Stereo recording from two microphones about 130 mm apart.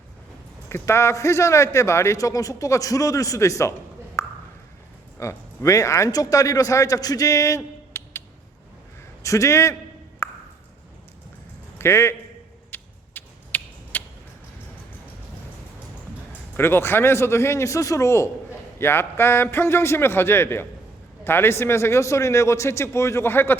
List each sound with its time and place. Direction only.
0.7 s a man's voice: 20° left (ahead or behind)
9.2 s a man's voice: 25° left (ahead or behind)
10.2 s a sound: 20° left (ahead or behind)
11.8 s a man's voice: 20° left (ahead or behind)
12.7 s a sound: 15° left (ahead or behind)
16.6 s a man's voice: 15° left (ahead or behind)